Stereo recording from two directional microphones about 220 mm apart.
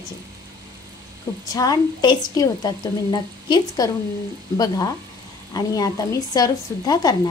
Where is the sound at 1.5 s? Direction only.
15° left (ahead or behind).